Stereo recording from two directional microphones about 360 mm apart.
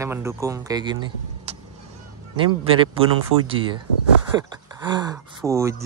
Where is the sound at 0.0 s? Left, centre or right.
Centre.